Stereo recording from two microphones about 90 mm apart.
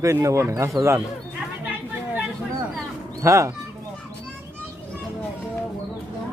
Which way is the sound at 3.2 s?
35° right (ahead or behind).